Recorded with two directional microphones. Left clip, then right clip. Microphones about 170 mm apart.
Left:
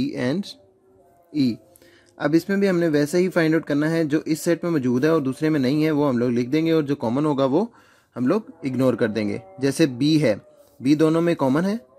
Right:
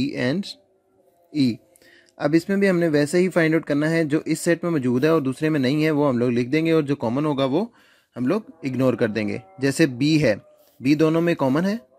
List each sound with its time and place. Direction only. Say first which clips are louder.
0.0 s speech: right 1 dB; 20° right (ahead or behind)